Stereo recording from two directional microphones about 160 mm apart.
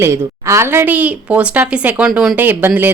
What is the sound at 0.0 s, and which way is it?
A woman's voice, 15° right (ahead or behind).